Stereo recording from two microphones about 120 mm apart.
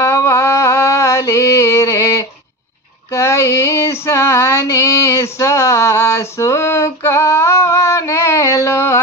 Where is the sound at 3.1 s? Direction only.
25° left (ahead or behind).